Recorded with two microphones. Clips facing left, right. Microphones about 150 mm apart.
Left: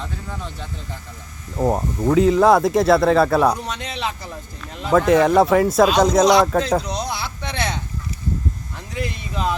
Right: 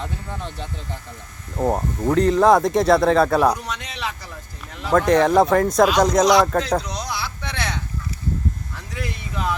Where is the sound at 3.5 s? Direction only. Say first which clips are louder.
Left 2 dB; 30° left (ahead or behind).